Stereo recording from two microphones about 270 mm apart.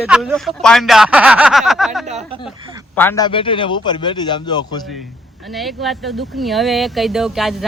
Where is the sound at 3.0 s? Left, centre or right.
Centre.